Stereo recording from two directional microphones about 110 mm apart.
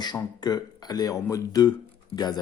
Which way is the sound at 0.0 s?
40° left (ahead or behind).